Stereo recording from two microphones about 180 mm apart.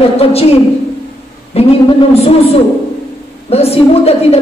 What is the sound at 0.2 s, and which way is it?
A woman's voice, 35° left (ahead or behind).